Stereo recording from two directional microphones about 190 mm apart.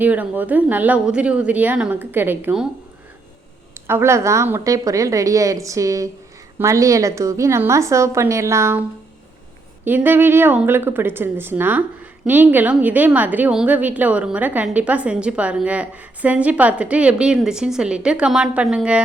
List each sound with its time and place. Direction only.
0.0 s a woman's voice: 10° right (ahead or behind)
3.8 s a woman's voice: 10° right (ahead or behind)
9.8 s a woman's voice: 10° right (ahead or behind)